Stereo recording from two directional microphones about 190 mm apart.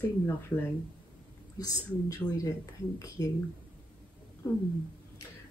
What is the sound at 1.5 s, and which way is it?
Speech, 20° left (ahead or behind).